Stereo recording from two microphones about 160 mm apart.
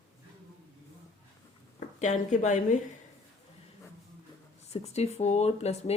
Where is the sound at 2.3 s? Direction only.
50° left (ahead or behind).